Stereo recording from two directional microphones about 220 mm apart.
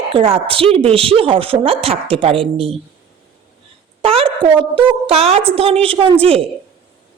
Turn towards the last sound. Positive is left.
turn(degrees=-25)  # may be behind; listen again after turning